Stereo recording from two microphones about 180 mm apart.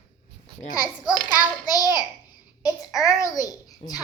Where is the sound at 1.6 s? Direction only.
20° left (ahead or behind).